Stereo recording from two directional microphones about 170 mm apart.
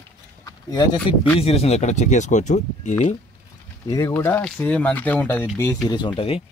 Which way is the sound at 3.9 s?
20° left (ahead or behind).